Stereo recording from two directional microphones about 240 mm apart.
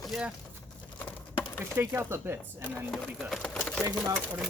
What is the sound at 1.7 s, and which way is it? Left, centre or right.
Speech, centre.